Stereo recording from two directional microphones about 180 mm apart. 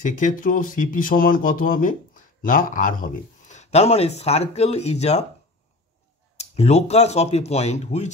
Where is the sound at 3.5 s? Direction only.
35° left (ahead or behind).